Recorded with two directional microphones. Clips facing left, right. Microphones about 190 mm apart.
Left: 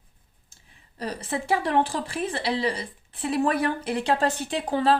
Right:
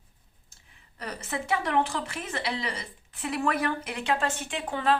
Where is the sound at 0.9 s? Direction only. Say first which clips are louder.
Left 4 dB; 30° left (ahead or behind).